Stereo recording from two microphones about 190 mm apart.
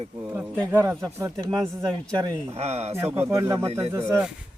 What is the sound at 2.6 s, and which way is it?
Speech, 35° right (ahead or behind).